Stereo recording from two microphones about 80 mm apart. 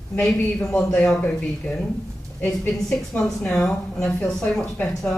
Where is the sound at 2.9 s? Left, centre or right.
Centre.